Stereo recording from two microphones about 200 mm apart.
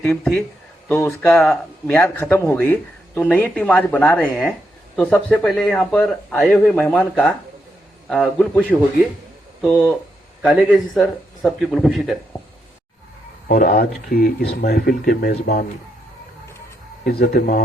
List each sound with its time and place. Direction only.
0.0 s a man's voice: 5° left (ahead or behind)
13.5 s speech: 50° left (ahead or behind)
17.0 s speech: 50° left (ahead or behind)